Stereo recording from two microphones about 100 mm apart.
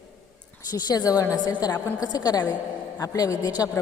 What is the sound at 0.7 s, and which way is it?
A woman's voice, 40° left (ahead or behind).